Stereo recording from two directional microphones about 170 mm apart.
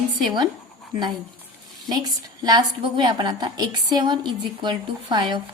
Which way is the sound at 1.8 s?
25° right (ahead or behind).